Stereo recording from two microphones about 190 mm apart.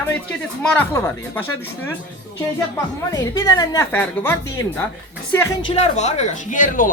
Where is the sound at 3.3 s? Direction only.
20° left (ahead or behind).